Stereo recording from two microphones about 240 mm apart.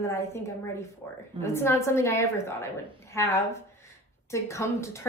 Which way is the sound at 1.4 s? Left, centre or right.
Centre.